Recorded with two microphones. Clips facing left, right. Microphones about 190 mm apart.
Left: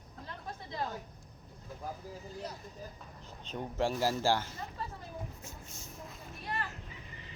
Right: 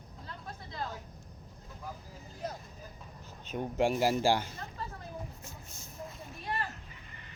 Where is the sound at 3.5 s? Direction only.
15° right (ahead or behind).